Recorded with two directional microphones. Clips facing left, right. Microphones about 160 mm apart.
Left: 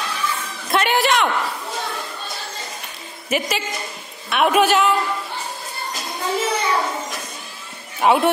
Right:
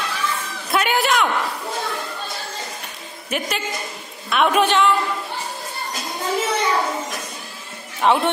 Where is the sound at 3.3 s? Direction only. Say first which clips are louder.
Left 2 dB; centre (ahead or behind).